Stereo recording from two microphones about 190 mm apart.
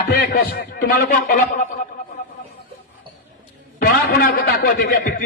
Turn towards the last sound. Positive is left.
turn(degrees=50)  # may be behind; listen again after turning